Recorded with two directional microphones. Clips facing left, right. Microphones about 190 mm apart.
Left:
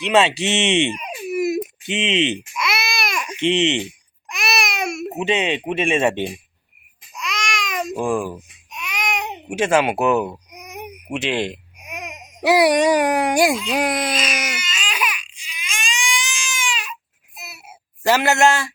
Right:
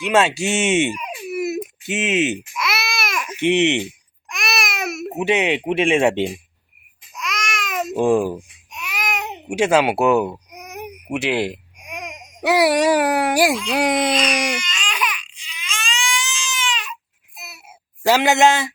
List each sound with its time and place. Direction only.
0.0 s speech: centre (ahead or behind)
1.3 s baby cry: 15° left (ahead or behind)
1.9 s speech: 5° right (ahead or behind)
4.3 s baby cry: centre (ahead or behind)
5.2 s speech: 10° right (ahead or behind)
7.2 s babbling: centre (ahead or behind)
7.9 s a child's voice: 20° right (ahead or behind)
8.7 s baby cry: 5° right (ahead or behind)
11.8 s speech: 5° left (ahead or behind)
14.1 s baby cry: 5° left (ahead or behind)
17.3 s a sound: centre (ahead or behind)
18.0 s speech: 15° right (ahead or behind)